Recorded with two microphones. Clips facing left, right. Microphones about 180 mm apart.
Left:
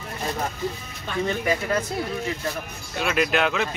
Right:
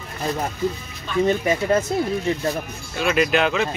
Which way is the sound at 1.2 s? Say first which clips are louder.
Right 5 dB; 25° right (ahead or behind).